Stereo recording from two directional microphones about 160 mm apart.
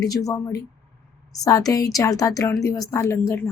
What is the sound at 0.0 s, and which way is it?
Speech, 20° left (ahead or behind).